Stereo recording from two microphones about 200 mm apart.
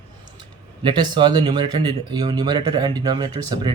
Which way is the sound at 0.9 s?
25° right (ahead or behind).